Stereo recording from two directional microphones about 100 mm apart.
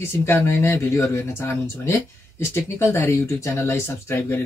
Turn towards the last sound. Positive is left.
turn(degrees=25)  # may be behind; listen again after turning